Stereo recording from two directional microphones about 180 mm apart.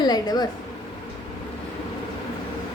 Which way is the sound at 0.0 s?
20° left (ahead or behind).